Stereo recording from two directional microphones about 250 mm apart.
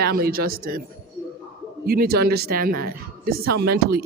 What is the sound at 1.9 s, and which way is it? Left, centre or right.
Speech, right.